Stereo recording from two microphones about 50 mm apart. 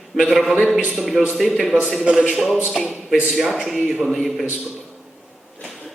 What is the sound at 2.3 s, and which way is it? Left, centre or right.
A man's voice, centre.